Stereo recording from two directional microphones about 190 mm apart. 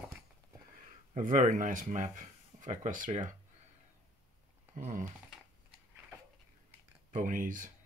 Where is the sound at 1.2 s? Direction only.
40° right (ahead or behind).